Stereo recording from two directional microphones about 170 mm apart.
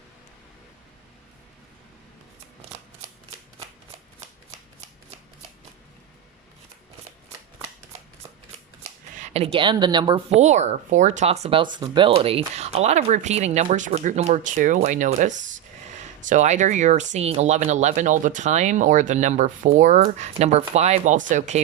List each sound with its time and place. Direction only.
8.8 s speech: 40° right (ahead or behind)
10.3 s speech: 40° right (ahead or behind)